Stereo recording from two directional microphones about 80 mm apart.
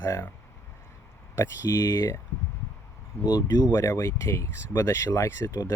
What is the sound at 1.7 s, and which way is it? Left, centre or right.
Speech, left.